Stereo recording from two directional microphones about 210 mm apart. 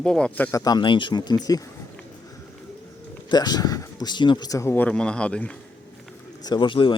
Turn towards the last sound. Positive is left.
turn(degrees=25)  # may be behind; listen again after turning